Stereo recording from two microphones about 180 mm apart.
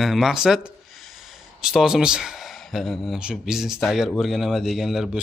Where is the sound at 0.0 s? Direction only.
Centre (ahead or behind).